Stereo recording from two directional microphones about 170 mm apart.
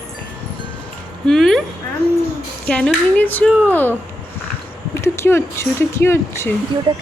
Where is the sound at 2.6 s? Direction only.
5° left (ahead or behind).